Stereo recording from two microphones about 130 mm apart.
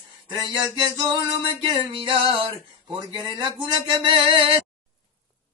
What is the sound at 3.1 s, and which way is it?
Music, 35° right (ahead or behind).